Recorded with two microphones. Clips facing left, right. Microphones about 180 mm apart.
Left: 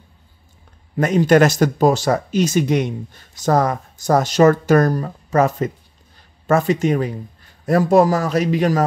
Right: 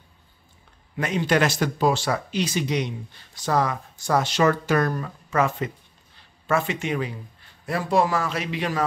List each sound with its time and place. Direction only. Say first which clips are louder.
0.9 s a man's voice: left 9 dB; 45° left (ahead or behind)